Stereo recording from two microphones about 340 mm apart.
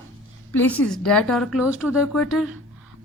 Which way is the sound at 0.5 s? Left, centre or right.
Centre.